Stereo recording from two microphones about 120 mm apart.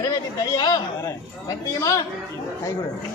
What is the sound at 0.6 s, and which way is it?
A man's voice, 35° left (ahead or behind).